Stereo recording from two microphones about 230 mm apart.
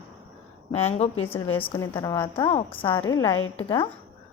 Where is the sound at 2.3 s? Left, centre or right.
Left.